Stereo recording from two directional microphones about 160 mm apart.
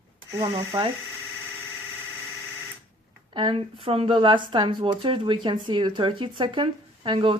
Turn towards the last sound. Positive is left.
turn(degrees=-30)  # may be behind; listen again after turning